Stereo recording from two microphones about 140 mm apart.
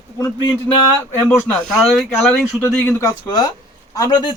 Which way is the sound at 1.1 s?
20° left (ahead or behind).